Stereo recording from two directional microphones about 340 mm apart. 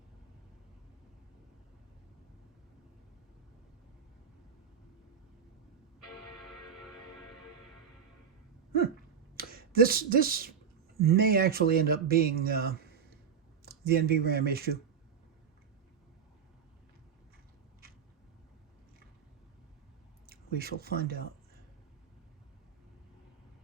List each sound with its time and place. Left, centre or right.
9.3 s finger snapping: right
11.0 s speech: right
20.6 s speech: right